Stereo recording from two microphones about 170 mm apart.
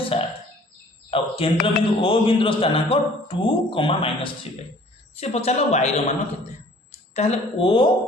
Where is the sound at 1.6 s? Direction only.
30° left (ahead or behind).